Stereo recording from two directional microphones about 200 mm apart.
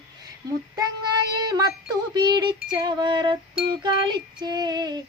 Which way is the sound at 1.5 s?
20° right (ahead or behind).